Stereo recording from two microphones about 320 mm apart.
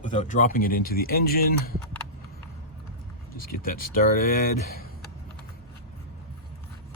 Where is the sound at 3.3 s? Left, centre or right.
Left.